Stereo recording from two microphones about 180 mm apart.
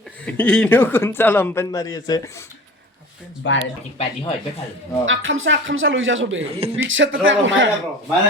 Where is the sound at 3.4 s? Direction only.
90° left.